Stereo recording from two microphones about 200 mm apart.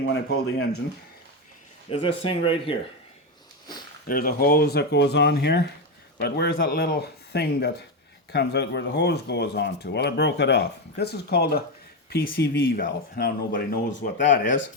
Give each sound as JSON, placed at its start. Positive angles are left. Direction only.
{"t": 0.0, "sound": "speech", "side_deg": 60}
{"t": 1.9, "sound": "speech", "side_deg": 25}
{"t": 4.1, "sound": "speech", "side_deg": 45}